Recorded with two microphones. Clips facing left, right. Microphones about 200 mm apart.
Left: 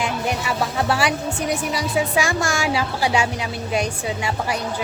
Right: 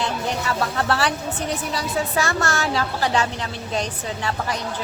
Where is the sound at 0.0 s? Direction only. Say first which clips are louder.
Left 1 dB; 10° left (ahead or behind).